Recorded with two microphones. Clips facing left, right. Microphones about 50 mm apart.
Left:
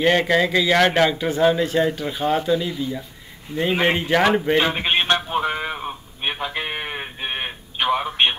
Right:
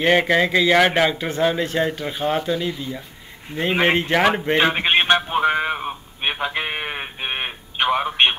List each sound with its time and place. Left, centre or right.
0.0 s speech: centre
2.2 s speech: right
2.5 s speech: centre
5.0 s a sound: right